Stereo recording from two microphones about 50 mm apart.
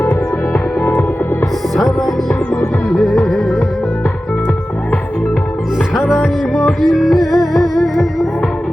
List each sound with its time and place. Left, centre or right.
0.1 s music: left
1.7 s music: centre
6.1 s music: centre